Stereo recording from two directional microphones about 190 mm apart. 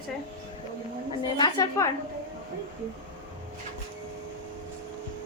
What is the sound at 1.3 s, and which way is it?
Speech, 20° left (ahead or behind).